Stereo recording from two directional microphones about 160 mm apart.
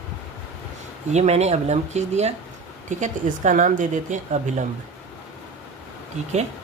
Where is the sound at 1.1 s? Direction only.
45° right (ahead or behind).